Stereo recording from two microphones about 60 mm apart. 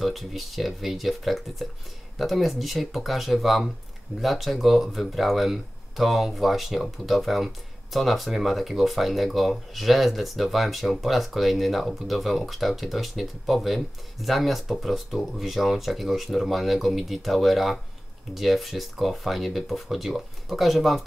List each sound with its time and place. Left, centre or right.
0.0 s speech: centre